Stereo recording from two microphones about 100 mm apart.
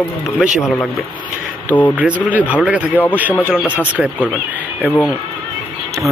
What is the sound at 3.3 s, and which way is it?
Speech, 20° left (ahead or behind).